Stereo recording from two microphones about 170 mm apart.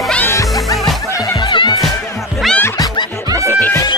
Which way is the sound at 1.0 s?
20° left (ahead or behind).